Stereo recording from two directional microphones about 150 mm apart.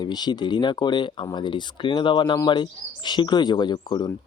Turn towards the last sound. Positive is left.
turn(degrees=25)  # may be behind; listen again after turning